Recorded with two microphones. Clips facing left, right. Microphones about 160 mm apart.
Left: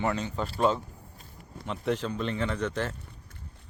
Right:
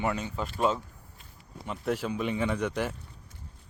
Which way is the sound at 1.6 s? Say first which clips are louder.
Left 1 dB; 5° right (ahead or behind).